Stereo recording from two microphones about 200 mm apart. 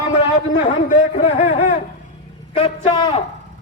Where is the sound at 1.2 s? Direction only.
30° left (ahead or behind).